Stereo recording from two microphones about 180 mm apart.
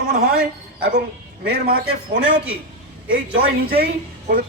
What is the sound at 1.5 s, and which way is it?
A man's voice, 55° right (ahead or behind).